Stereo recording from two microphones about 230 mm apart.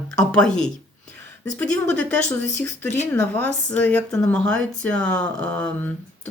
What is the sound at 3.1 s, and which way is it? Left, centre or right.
A woman's voice, centre.